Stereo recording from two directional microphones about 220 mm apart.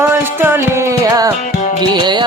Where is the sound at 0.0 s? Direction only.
10° right (ahead or behind).